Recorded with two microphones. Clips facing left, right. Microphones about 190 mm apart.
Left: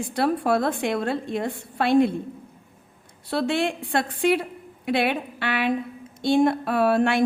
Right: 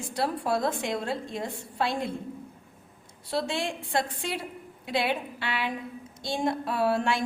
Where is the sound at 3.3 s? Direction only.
60° left (ahead or behind).